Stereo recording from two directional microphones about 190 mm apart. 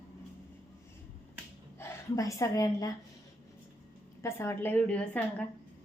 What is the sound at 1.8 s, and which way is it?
A woman's voice, 15° left (ahead or behind).